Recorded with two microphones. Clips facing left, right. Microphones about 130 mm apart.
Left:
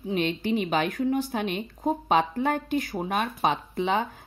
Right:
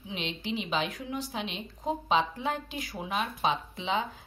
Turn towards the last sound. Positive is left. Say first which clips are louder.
# left 5 dB
turn(degrees=55)  # may be behind; listen again after turning